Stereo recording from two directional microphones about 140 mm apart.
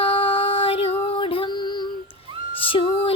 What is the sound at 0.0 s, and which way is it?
Music, 40° left (ahead or behind).